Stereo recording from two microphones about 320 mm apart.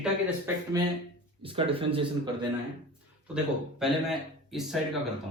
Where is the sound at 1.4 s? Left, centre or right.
Centre.